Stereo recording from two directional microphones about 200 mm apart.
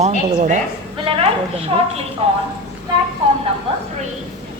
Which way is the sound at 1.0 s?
30° right (ahead or behind).